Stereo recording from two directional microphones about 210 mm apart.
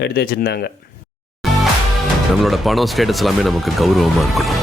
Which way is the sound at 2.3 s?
Centre (ahead or behind).